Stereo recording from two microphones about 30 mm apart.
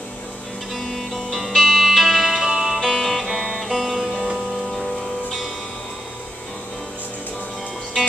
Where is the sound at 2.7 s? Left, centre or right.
Centre.